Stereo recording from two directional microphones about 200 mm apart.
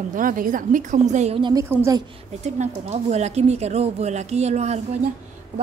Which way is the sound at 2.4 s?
35° right (ahead or behind).